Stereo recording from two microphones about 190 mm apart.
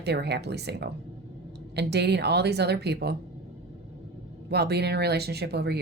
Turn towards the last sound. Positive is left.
turn(degrees=-60)  # may be behind; listen again after turning